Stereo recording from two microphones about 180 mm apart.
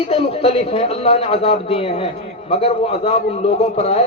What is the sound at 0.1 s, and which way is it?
A man's voice, 35° left (ahead or behind).